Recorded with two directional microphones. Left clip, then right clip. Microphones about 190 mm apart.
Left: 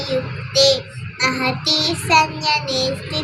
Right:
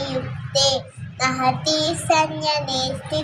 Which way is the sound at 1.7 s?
15° right (ahead or behind).